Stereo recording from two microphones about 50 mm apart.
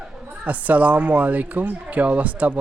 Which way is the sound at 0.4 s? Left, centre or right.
Right.